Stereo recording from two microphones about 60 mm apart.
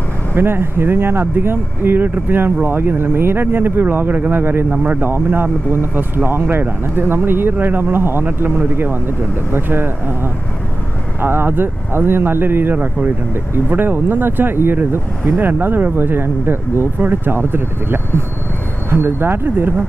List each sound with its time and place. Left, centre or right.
0.3 s speech: right
5.1 s speech: right